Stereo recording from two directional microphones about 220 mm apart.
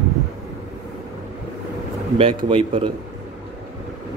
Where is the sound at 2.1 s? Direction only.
25° right (ahead or behind).